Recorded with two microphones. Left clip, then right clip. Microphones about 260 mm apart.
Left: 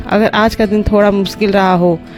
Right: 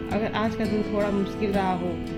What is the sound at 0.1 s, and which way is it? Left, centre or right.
Speech, left.